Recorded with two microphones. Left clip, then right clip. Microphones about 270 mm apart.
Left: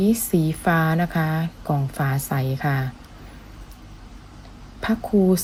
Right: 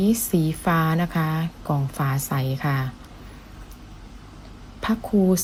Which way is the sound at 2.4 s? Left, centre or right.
Left.